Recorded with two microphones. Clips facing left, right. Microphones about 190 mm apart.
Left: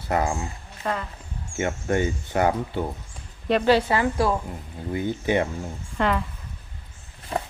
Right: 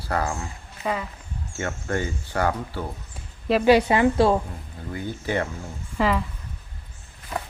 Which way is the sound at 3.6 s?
15° right (ahead or behind).